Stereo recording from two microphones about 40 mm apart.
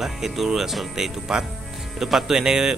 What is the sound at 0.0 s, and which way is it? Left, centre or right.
Speech, centre.